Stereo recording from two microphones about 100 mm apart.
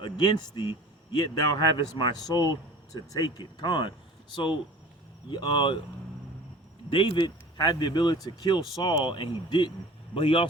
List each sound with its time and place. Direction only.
0.0 s speech: 50° left (ahead or behind)
5.3 s speech: 50° left (ahead or behind)
6.9 s speech: 55° left (ahead or behind)